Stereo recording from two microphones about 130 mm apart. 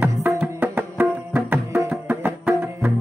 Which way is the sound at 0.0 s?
15° right (ahead or behind).